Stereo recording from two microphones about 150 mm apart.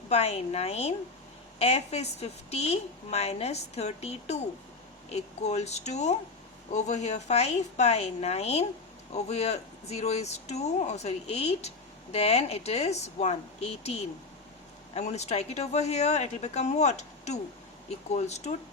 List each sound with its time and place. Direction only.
0.1 s a woman's voice: 45° left (ahead or behind)